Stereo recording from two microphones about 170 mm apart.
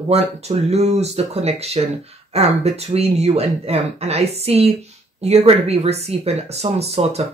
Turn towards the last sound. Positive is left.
turn(degrees=-40)  # may be behind; listen again after turning